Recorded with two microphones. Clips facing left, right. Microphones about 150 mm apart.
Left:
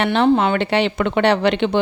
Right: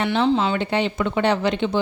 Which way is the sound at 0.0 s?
65° left (ahead or behind).